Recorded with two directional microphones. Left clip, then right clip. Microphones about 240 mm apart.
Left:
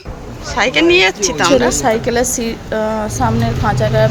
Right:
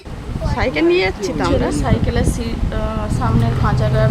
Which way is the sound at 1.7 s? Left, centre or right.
Left.